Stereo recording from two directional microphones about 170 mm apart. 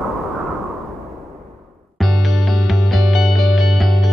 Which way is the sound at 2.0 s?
Centre (ahead or behind).